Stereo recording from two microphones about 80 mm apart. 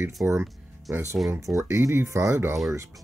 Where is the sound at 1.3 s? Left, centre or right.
Right.